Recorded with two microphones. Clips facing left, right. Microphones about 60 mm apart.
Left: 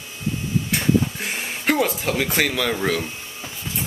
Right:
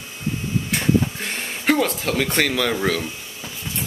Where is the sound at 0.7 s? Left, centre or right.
Centre.